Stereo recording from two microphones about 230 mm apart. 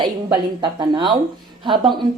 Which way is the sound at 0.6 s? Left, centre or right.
Right.